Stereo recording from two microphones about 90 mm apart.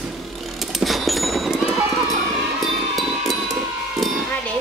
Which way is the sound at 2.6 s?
Centre (ahead or behind).